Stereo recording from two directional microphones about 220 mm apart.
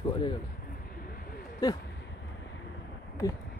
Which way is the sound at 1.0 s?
40° left (ahead or behind).